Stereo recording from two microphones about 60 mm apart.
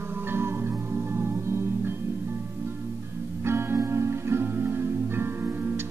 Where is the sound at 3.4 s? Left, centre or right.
Right.